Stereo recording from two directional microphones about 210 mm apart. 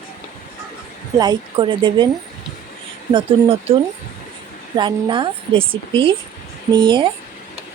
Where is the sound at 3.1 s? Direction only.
25° right (ahead or behind).